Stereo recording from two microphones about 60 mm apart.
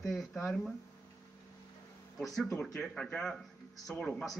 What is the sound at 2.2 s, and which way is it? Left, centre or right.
Speech, centre.